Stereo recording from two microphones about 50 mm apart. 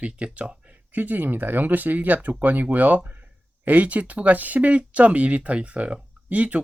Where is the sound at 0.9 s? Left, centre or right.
Right.